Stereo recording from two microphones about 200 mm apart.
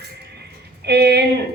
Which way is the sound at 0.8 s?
55° right (ahead or behind).